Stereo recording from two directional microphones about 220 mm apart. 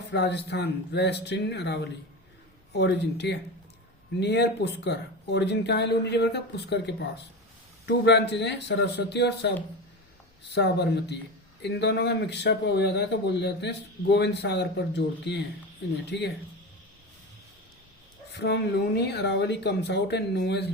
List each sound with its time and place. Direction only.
0.1 s a man's voice: 50° left (ahead or behind)
18.3 s a man's voice: 50° left (ahead or behind)